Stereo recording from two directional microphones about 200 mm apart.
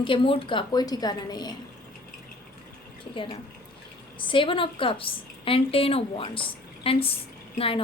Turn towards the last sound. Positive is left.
turn(degrees=25)  # may be behind; listen again after turning